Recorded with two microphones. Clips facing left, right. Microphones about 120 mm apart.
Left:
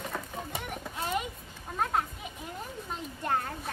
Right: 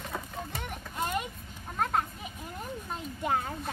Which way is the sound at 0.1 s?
5° left (ahead or behind).